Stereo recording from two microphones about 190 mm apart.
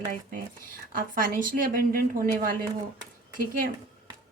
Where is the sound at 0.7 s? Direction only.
45° right (ahead or behind).